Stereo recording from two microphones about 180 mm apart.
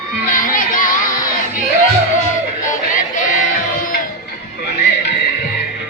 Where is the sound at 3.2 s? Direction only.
45° left (ahead or behind).